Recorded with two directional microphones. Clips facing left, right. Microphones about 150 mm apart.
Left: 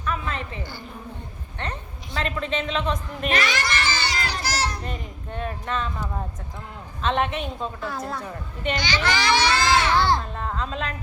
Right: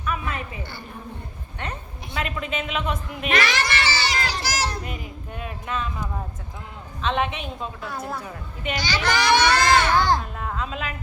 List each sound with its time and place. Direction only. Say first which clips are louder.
0.0 s a sound: even; 10° right (ahead or behind)
2.2 s a woman's voice: left 3 dB; 10° right (ahead or behind)
3.3 s children playing: right 2 dB; 80° right
4.8 s a woman's voice: even; 10° right (ahead or behind)
9.6 s a sound: right 2 dB; centre (ahead or behind)
9.8 s a child's voice: even; 45° right (ahead or behind)
10.3 s a woman's voice: left 1 dB; 5° right (ahead or behind)